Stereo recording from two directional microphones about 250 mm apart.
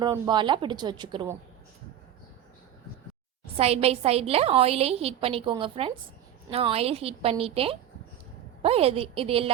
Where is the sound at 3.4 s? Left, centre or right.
Right.